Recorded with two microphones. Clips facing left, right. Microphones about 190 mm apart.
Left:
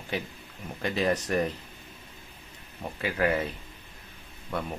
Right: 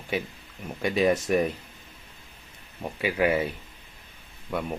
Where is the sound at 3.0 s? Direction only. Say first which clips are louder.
Right 3 dB; 10° right (ahead or behind).